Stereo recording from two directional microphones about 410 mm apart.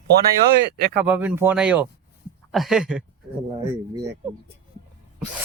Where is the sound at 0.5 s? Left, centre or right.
Right.